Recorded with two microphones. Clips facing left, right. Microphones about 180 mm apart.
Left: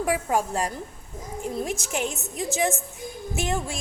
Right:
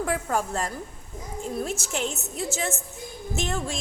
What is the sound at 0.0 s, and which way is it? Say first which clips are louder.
A woman's voice: left 2 dB; 15° left (ahead or behind).